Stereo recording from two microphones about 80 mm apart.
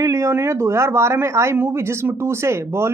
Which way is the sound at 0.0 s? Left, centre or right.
Right.